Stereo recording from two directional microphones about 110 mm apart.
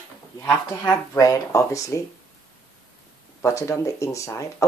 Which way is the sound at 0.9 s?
35° left (ahead or behind).